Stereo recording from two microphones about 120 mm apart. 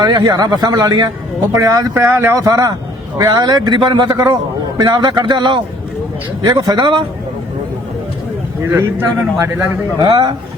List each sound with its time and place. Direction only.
0.0 s a man's voice: 35° right (ahead or behind)
1.9 s a man's voice: 20° right (ahead or behind); by 7.0 s 40° right (ahead or behind)
8.7 s speech: 20° right (ahead or behind)
10.0 s a man's voice: 40° right (ahead or behind)